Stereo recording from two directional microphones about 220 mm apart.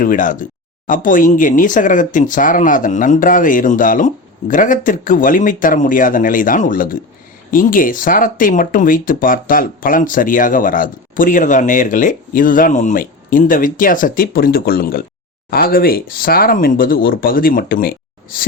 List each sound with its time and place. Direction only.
0.0 s speech: 40° left (ahead or behind)